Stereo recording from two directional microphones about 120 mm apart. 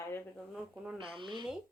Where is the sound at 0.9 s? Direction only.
45° right (ahead or behind).